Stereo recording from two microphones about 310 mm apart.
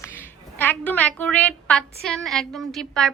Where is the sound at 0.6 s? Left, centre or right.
Centre.